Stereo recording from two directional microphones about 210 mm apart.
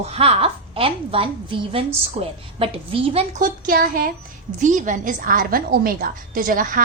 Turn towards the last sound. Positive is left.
turn(degrees=-40)  # may be behind; listen again after turning